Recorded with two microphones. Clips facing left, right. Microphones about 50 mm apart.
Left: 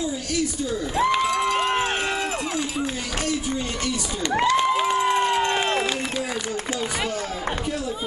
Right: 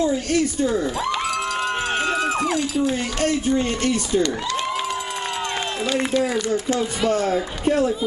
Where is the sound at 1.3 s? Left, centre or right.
Left.